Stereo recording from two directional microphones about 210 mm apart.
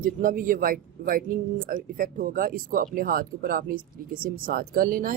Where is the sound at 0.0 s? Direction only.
40° right (ahead or behind).